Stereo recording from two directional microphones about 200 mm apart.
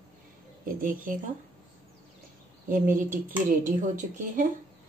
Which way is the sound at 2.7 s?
40° right (ahead or behind).